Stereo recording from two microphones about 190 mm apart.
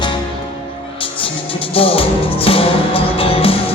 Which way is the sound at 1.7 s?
30° left (ahead or behind).